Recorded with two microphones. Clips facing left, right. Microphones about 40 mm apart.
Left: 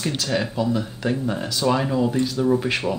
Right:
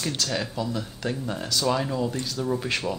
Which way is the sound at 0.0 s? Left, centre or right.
Centre.